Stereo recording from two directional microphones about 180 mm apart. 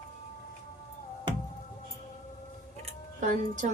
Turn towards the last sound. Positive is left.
turn(degrees=-45)  # may be behind; listen again after turning